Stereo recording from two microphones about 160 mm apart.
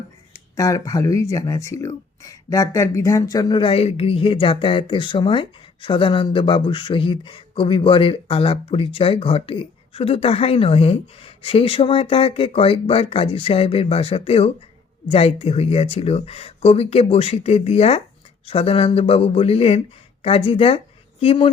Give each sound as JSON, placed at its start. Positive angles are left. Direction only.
{"t": 0.5, "sound": "speech", "side_deg": 20}